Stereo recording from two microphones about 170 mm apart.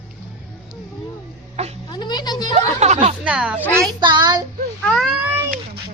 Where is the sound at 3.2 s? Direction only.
5° right (ahead or behind).